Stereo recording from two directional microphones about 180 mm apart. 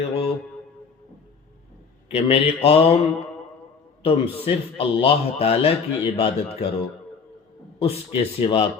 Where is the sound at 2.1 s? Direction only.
35° left (ahead or behind).